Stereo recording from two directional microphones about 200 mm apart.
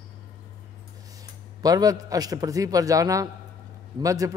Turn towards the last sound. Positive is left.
turn(degrees=-15)  # may be behind; listen again after turning